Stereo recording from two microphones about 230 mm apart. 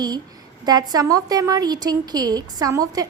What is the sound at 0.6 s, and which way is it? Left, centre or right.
A woman's voice, centre.